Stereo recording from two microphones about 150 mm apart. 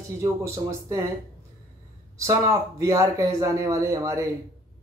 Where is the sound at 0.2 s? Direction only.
20° right (ahead or behind).